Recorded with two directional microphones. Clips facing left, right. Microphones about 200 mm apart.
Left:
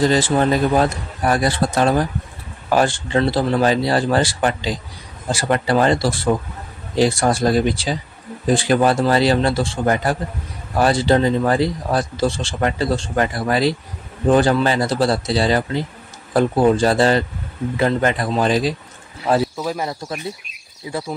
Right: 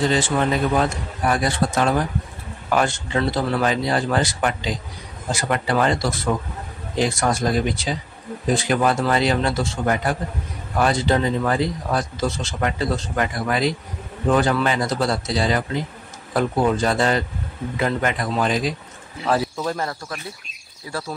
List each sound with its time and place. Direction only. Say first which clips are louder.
0.0 s speech: left 4 dB; 40° left (ahead or behind)
19.5 s speech: left 1 dB; 5° left (ahead or behind)